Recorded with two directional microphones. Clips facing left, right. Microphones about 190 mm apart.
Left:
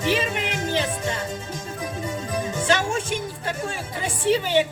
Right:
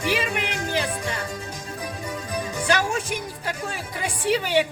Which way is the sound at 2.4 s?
25° left (ahead or behind).